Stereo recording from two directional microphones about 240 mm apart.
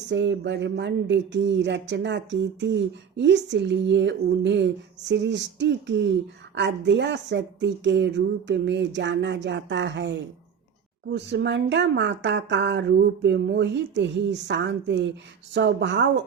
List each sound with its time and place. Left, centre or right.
0.1 s speech: right